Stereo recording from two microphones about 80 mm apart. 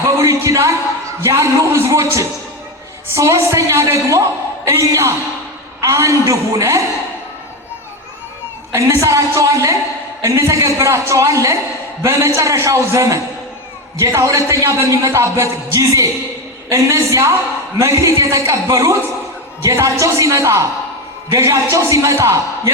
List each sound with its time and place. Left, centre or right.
0.0 s a sound: right
1.2 s speech: right
8.7 s a woman's voice: right